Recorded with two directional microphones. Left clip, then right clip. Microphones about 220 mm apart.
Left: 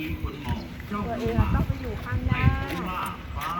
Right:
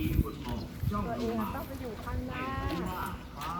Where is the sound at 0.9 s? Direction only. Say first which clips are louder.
Left 5 dB; 40° left (ahead or behind).